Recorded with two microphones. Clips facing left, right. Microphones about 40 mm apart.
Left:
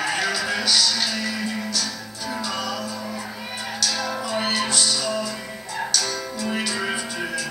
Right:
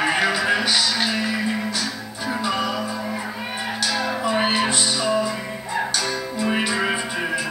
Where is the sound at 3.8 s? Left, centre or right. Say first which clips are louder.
Right 3 dB; right.